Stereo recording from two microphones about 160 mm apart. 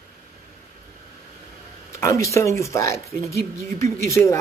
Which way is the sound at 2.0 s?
20° left (ahead or behind).